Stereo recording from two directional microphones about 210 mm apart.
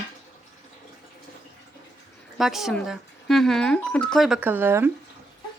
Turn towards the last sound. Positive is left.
turn(degrees=-10)  # may be behind; listen again after turning